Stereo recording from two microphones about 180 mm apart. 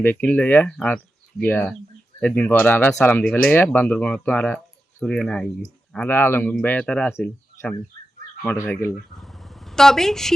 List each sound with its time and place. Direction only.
0.0 s speech: 10° left (ahead or behind)
9.1 s vehicle: centre (ahead or behind)